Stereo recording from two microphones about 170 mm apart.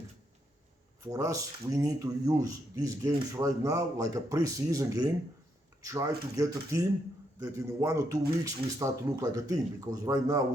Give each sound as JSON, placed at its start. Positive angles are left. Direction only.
{"t": 1.0, "sound": "speech", "side_deg": -20}